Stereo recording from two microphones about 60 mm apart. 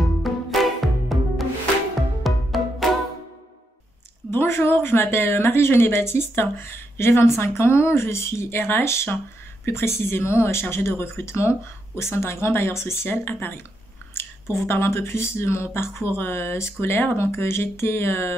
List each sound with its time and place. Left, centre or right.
0.2 s music: centre
4.3 s speech: left